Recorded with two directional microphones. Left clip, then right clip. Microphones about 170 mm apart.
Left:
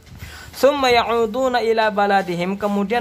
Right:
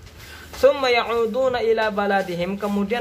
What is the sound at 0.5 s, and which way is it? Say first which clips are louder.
Speech: left 2 dB; 40° left (ahead or behind).